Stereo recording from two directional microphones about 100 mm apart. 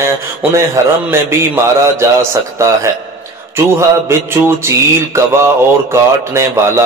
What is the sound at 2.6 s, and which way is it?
Speech, 25° right (ahead or behind).